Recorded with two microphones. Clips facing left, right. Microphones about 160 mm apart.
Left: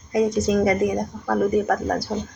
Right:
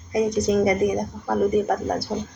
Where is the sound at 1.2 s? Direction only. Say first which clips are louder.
Even; 25° right (ahead or behind).